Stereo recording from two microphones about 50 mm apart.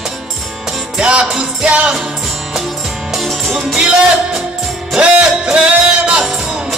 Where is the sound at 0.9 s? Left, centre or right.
Right.